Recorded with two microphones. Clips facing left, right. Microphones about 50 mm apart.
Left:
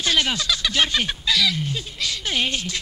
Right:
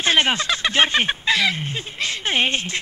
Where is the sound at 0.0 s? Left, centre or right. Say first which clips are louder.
Right 3 dB; right.